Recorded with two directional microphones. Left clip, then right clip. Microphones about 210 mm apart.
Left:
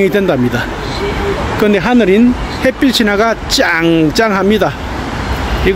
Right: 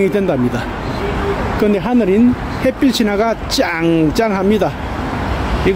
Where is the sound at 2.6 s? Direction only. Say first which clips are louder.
Left 4 dB; 5° left (ahead or behind).